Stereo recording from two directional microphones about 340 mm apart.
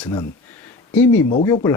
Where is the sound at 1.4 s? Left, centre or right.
Centre.